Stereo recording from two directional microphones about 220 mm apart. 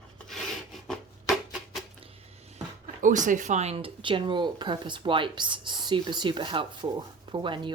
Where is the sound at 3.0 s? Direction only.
35° right (ahead or behind).